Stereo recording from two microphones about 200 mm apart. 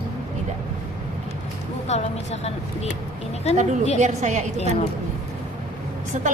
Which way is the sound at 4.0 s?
35° right (ahead or behind).